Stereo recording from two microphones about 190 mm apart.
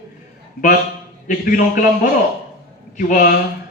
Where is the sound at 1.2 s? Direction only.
45° left (ahead or behind).